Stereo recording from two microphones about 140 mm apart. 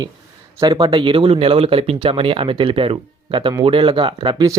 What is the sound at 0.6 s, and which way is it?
Speech, 35° right (ahead or behind).